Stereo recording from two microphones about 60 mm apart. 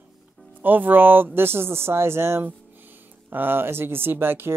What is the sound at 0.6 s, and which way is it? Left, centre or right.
Speech, right.